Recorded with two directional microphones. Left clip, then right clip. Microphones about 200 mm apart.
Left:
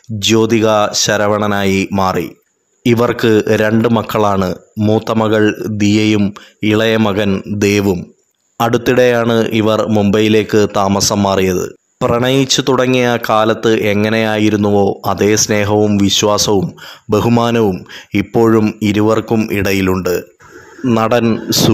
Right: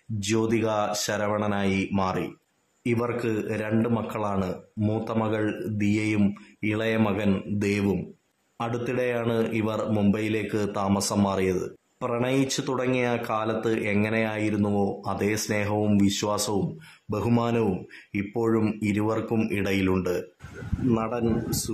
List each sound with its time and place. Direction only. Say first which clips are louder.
0.2 s a man's voice: left 14 dB; 35° left (ahead or behind)
18.6 s speech: left 12 dB; 25° left (ahead or behind)
18.9 s a man's voice: left 14 dB; 35° left (ahead or behind)